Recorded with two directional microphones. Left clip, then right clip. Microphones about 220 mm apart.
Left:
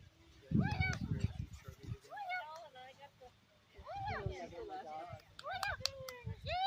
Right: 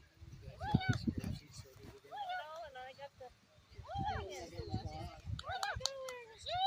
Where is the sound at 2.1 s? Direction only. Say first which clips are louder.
Right 2 dB; 15° left (ahead or behind).